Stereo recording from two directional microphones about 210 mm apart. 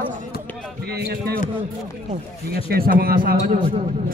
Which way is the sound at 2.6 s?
45° right (ahead or behind).